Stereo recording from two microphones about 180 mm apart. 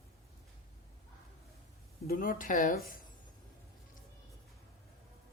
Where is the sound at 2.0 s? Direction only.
50° left (ahead or behind).